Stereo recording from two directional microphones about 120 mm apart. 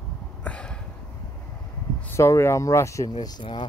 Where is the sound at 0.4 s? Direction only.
10° left (ahead or behind).